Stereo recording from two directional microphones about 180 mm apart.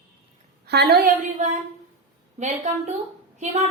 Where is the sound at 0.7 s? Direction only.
65° right (ahead or behind); by 1.4 s 50° right (ahead or behind).